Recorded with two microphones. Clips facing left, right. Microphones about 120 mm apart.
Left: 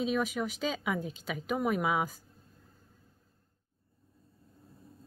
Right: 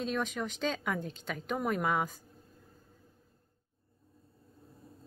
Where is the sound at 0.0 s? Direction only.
5° left (ahead or behind).